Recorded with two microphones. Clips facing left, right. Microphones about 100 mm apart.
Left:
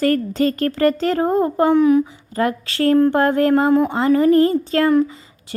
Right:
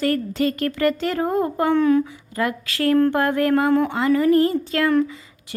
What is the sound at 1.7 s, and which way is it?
Speech, 15° left (ahead or behind).